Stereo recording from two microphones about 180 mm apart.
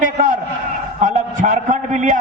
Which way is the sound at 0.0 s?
50° right (ahead or behind).